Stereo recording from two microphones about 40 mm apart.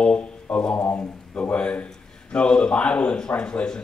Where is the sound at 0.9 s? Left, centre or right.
Left.